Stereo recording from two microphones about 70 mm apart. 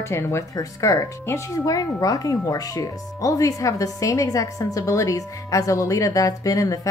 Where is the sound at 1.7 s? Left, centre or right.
Left.